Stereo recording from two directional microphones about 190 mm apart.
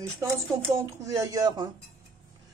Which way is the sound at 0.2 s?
15° right (ahead or behind).